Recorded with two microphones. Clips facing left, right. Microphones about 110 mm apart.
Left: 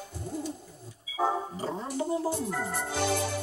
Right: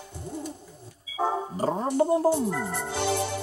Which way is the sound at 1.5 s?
50° right (ahead or behind).